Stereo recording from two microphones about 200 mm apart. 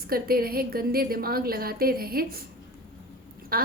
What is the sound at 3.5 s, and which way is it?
Speech, 50° right (ahead or behind).